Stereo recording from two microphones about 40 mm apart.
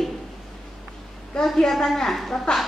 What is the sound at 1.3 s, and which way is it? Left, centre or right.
A woman's voice, centre.